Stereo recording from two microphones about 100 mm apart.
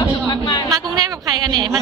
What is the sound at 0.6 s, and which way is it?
A woman's voice, 40° right (ahead or behind).